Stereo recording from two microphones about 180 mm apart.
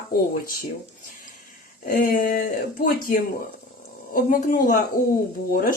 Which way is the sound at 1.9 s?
55° left (ahead or behind).